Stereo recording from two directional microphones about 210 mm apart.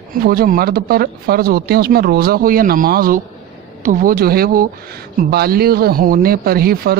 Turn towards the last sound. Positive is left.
turn(degrees=-45)  # may be behind; listen again after turning